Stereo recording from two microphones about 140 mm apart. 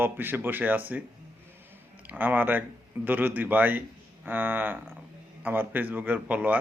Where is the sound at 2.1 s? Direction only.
15° right (ahead or behind).